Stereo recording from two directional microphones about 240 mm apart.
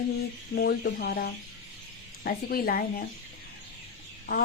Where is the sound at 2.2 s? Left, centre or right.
Left.